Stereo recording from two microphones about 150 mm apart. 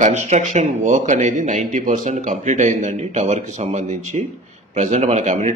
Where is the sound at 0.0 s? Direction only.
50° right (ahead or behind).